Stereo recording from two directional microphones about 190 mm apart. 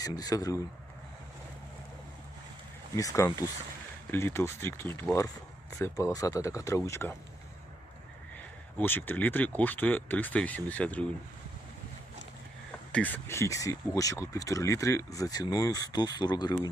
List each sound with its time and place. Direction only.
0.0 s speech: 20° left (ahead or behind)
2.9 s speech: 15° left (ahead or behind)
8.8 s speech: 10° left (ahead or behind)
12.9 s speech: 10° left (ahead or behind)